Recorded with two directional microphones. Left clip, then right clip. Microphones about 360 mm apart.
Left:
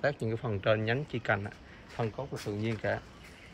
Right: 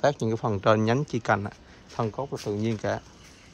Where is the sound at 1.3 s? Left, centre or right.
Right.